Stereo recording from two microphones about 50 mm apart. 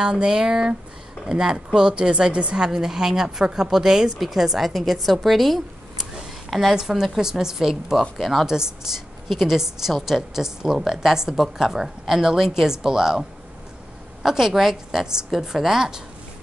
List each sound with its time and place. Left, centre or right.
0.0 s a woman's voice: centre
8.0 s speech: centre
8.5 s a woman's voice: centre
14.2 s a woman's voice: centre